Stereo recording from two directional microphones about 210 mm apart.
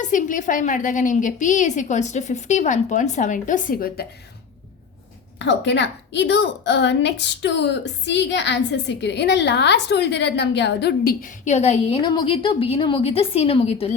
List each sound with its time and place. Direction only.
0.0 s a woman's voice: 35° left (ahead or behind)
5.4 s a woman's voice: 55° left (ahead or behind); by 13.9 s 30° left (ahead or behind)